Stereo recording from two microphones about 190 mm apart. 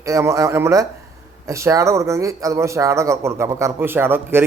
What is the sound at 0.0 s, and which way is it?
Speech, 15° right (ahead or behind).